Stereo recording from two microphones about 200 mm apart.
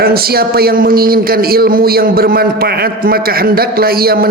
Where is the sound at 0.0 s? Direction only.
50° right (ahead or behind).